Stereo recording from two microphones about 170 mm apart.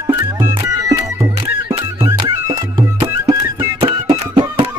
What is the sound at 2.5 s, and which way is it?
Music, 20° right (ahead or behind).